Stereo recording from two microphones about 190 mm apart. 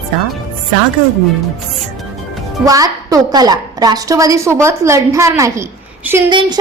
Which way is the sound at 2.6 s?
20° right (ahead or behind).